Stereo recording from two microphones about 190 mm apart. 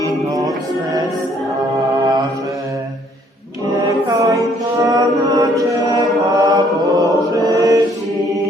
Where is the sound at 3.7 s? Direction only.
20° right (ahead or behind).